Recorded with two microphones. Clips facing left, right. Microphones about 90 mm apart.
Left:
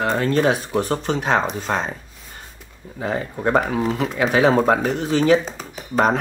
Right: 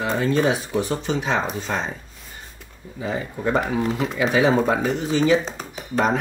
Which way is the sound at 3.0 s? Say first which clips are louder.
Left 2 dB; 55° left (ahead or behind).